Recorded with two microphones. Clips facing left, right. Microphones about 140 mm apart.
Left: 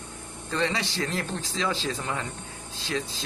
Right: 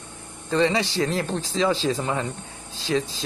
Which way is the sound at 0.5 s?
20° right (ahead or behind).